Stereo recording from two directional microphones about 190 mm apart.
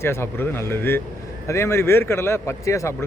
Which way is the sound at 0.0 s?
15° left (ahead or behind).